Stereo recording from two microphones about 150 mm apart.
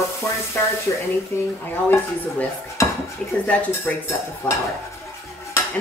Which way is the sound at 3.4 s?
10° left (ahead or behind).